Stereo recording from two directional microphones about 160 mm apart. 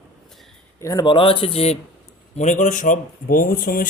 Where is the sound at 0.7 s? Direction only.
20° left (ahead or behind).